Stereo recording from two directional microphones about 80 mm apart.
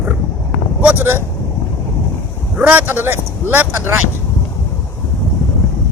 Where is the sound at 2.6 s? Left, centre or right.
Right.